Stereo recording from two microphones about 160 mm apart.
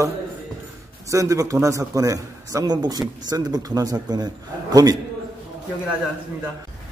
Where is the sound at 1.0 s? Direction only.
20° right (ahead or behind).